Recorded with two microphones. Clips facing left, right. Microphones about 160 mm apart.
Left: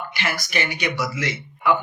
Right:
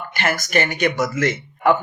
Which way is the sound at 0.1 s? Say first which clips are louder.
Right 9 dB; 50° right (ahead or behind).